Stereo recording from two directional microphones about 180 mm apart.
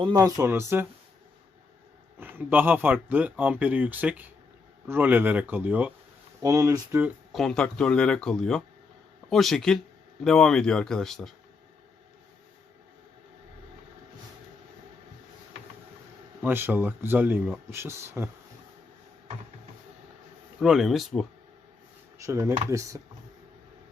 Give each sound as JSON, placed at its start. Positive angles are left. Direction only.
{"t": 0.0, "sound": "speech", "side_deg": -20}
{"t": 2.1, "sound": "speech", "side_deg": -10}
{"t": 7.3, "sound": "speech", "side_deg": 5}
{"t": 16.4, "sound": "speech", "side_deg": -10}
{"t": 20.6, "sound": "speech", "side_deg": 0}
{"t": 22.3, "sound": "speech", "side_deg": -15}